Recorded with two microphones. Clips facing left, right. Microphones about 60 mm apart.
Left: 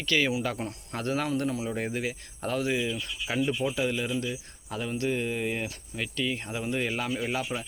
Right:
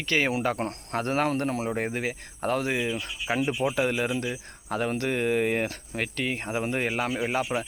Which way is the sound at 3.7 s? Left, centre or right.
Right.